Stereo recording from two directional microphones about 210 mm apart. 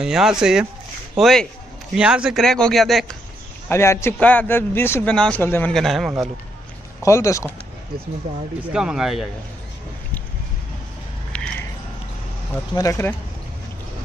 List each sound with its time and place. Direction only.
0.0 s a man's voice: 5° right (ahead or behind)
3.6 s a man's voice: 10° left (ahead or behind)
7.0 s a man's voice: 15° left (ahead or behind)
8.7 s a man's voice: 5° right (ahead or behind)
11.3 s a sound: 5° left (ahead or behind)
12.7 s a man's voice: 15° left (ahead or behind)